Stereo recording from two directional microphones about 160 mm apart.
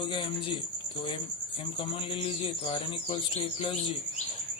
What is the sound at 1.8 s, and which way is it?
A man's voice, 35° left (ahead or behind).